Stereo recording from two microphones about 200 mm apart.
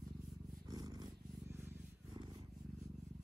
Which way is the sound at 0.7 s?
20° right (ahead or behind).